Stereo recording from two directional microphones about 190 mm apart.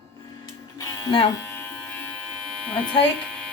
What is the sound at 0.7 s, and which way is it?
Electric shaver, 20° left (ahead or behind).